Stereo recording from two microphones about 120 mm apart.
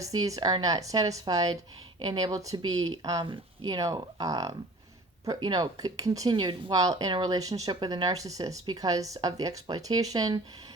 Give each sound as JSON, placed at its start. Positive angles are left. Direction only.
{"t": 0.0, "sound": "speech", "side_deg": -30}